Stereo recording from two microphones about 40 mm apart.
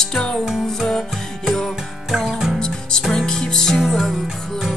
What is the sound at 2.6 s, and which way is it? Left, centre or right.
Music, centre.